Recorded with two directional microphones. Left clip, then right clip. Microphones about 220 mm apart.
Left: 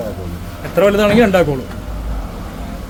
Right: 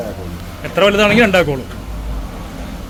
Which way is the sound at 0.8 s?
5° left (ahead or behind).